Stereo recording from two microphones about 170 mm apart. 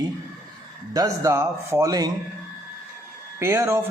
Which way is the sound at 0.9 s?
20° right (ahead or behind).